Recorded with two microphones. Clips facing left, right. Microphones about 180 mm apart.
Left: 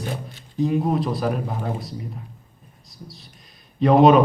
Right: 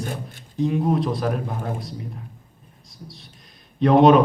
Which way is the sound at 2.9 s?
Centre (ahead or behind).